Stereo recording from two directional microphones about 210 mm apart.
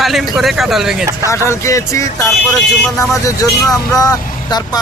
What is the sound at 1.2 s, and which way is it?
Speech, 15° left (ahead or behind).